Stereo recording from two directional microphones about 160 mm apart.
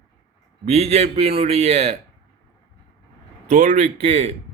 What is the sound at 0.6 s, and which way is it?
A man's voice, 40° right (ahead or behind).